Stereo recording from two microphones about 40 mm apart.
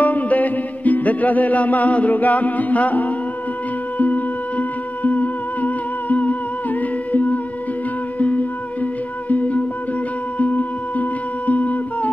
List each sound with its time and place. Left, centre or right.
0.0 s music: left
10.4 s music: left